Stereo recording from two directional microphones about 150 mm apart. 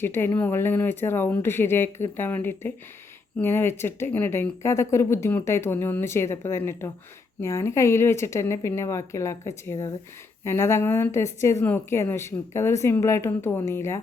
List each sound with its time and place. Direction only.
0.0 s speech: 15° left (ahead or behind)